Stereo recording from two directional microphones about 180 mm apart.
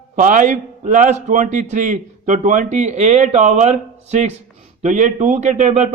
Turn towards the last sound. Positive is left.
turn(degrees=-40)  # may be behind; listen again after turning